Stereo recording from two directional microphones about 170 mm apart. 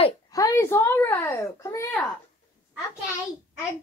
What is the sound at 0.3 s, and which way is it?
A child's voice, 15° left (ahead or behind).